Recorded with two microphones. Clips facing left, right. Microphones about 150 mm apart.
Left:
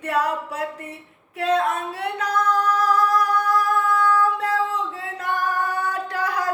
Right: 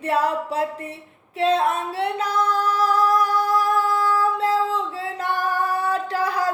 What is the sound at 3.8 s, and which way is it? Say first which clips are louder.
Female singing: left 1 dB; 30° right (ahead or behind).